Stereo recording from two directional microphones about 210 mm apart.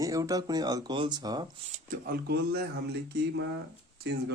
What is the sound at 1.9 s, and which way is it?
Speech, 45° right (ahead or behind).